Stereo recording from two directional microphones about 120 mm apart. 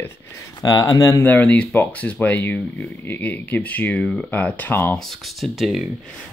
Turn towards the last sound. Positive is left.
turn(degrees=0)  # may be behind; listen again after turning